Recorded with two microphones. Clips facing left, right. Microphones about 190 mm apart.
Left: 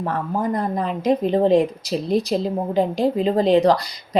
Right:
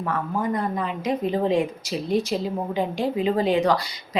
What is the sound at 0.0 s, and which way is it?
A woman's voice, 35° left (ahead or behind).